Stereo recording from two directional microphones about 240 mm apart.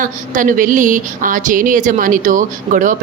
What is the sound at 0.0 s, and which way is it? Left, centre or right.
Speech, right.